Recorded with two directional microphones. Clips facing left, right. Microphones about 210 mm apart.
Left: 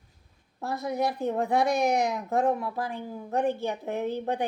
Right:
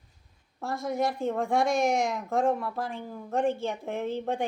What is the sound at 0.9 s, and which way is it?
Speech, 20° left (ahead or behind).